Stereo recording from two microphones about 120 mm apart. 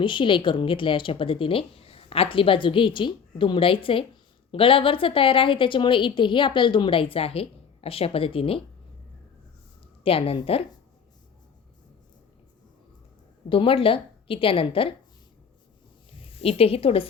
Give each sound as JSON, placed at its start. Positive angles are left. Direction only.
{"t": 0.0, "sound": "a woman's voice", "side_deg": 45}
{"t": 10.0, "sound": "a woman's voice", "side_deg": 55}
{"t": 13.5, "sound": "a woman's voice", "side_deg": 50}
{"t": 16.2, "sound": "a woman's voice", "side_deg": 55}